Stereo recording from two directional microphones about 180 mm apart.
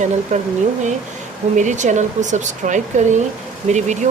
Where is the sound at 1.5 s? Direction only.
45° right (ahead or behind).